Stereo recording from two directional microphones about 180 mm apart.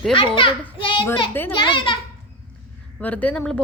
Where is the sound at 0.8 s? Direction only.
30° left (ahead or behind).